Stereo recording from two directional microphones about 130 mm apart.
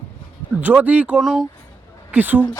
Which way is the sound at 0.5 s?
10° right (ahead or behind).